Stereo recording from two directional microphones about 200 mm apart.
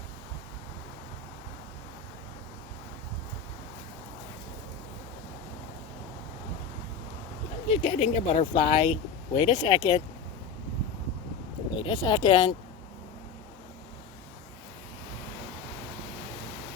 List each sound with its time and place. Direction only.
7.7 s speech: 30° left (ahead or behind)
11.8 s speech: 20° left (ahead or behind)